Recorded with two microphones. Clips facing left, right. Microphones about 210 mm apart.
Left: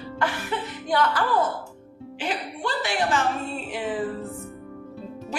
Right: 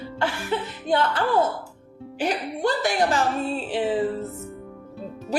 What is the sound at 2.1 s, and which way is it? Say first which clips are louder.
Speech: right 5 dB; 40° right (ahead or behind).